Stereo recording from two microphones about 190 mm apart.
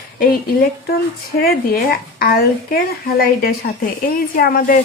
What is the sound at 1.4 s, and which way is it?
A woman's voice, 50° left (ahead or behind).